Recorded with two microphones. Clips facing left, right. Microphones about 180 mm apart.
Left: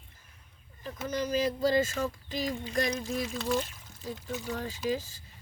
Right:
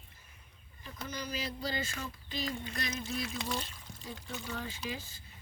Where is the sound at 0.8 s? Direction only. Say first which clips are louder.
Left 9 dB; 45° left (ahead or behind).